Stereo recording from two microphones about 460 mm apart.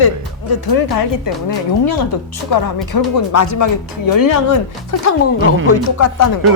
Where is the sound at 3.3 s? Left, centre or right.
Left.